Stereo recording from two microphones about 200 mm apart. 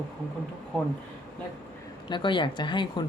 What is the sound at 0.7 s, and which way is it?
Speech, centre (ahead or behind).